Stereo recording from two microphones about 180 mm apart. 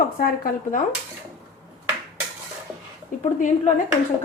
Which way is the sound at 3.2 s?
45° left (ahead or behind).